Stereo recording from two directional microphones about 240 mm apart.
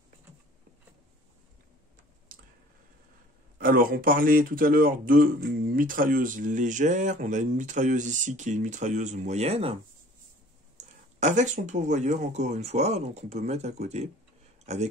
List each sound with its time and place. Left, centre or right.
3.5 s speech: right
10.8 s speech: right